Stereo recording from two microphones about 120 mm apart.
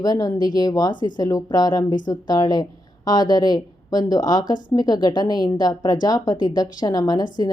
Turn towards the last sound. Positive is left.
turn(degrees=30)  # may be behind; listen again after turning